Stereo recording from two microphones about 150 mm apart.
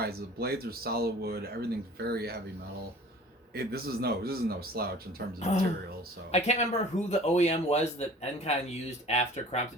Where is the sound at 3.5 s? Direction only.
90° right.